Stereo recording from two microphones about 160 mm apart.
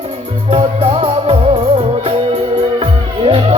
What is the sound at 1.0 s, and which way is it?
Music, 35° right (ahead or behind).